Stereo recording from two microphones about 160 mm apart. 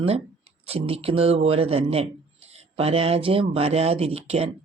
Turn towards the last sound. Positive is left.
turn(degrees=-40)  # may be behind; listen again after turning